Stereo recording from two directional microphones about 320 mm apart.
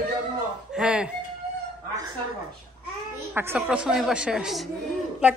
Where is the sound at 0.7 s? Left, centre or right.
Centre.